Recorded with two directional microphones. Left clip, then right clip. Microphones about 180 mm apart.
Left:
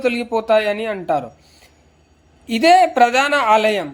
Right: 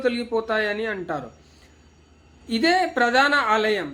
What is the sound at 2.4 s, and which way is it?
A woman's voice, 35° left (ahead or behind).